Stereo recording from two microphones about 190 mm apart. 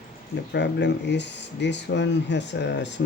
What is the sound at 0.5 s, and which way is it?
Speech, 65° left (ahead or behind).